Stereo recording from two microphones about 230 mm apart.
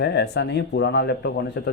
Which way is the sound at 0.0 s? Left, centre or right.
Left.